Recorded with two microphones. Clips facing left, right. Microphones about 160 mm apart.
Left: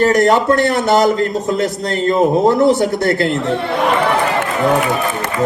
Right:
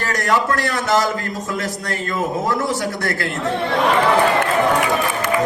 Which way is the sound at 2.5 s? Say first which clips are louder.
Left 9 dB; 25° left (ahead or behind).